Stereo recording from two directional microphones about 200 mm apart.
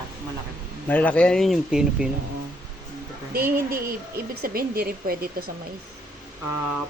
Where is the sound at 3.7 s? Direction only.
50° right (ahead or behind).